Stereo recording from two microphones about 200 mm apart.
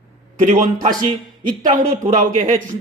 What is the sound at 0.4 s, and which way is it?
Speech, 40° right (ahead or behind).